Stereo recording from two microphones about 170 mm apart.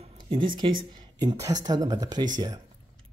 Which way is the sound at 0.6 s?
30° right (ahead or behind).